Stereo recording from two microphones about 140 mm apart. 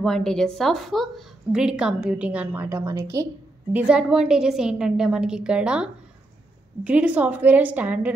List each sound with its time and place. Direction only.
0.0 s a woman's voice: 5° left (ahead or behind); by 3.3 s 25° right (ahead or behind)
3.7 s a woman's voice: 10° right (ahead or behind)